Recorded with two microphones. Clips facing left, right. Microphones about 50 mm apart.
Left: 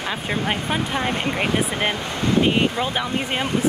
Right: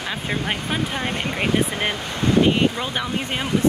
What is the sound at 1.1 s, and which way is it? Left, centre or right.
Speech, left.